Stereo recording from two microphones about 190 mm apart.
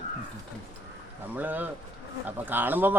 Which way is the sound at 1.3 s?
10° right (ahead or behind).